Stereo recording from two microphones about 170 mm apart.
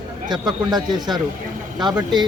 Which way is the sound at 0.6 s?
25° right (ahead or behind).